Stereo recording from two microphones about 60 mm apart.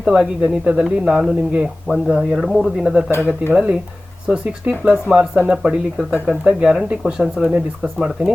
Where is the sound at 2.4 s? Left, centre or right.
Centre.